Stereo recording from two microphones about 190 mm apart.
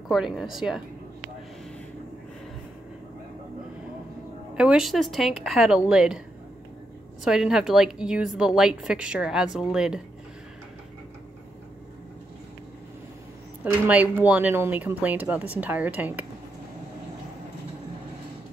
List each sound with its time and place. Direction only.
0.1 s a woman's voice: centre (ahead or behind)
4.6 s a woman's voice: 5° right (ahead or behind)
7.2 s a woman's voice: 5° right (ahead or behind)
13.7 s speech: 10° right (ahead or behind)